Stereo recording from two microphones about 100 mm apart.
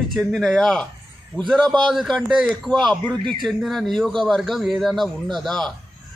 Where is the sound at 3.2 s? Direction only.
50° right (ahead or behind).